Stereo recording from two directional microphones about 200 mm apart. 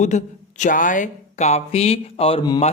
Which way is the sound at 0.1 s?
35° left (ahead or behind).